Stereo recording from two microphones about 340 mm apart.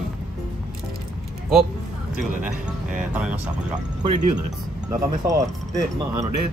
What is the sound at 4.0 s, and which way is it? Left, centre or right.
Speech, right.